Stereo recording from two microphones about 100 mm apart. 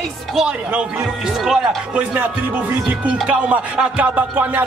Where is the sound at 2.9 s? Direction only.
15° right (ahead or behind).